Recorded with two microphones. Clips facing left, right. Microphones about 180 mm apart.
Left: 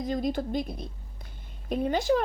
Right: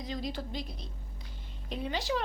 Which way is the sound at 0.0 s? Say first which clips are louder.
Left 8 dB; 50° left (ahead or behind).